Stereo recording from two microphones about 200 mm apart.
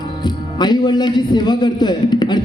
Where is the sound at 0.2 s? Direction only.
20° left (ahead or behind).